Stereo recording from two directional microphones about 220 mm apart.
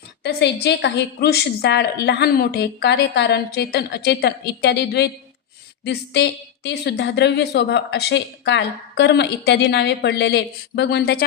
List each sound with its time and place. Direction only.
0.2 s a woman's voice: 45° left (ahead or behind)